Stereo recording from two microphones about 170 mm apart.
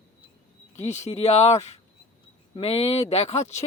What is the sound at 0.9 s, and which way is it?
Speech, 40° left (ahead or behind).